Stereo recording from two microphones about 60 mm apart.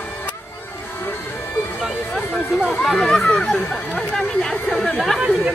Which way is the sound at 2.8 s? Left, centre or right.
Centre.